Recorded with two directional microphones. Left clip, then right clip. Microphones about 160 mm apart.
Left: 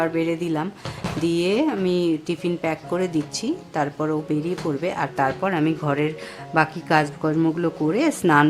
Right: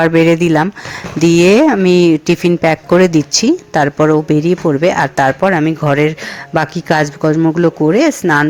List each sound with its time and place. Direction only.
0.0 s speech: 55° right (ahead or behind); by 8.1 s 30° right (ahead or behind)